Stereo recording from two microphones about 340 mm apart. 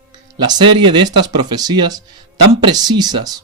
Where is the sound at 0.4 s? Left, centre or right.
Centre.